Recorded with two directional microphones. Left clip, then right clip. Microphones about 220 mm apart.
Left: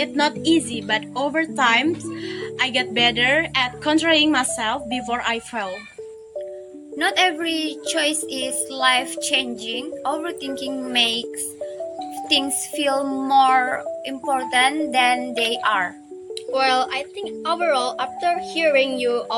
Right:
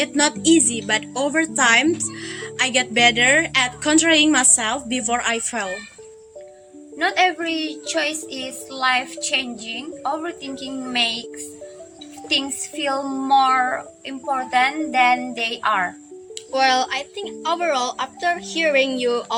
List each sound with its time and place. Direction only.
0.0 s speech: 10° right (ahead or behind)
7.0 s a woman's voice: 45° left (ahead or behind)
12.3 s a woman's voice: 45° left (ahead or behind)
16.5 s speech: 15° left (ahead or behind)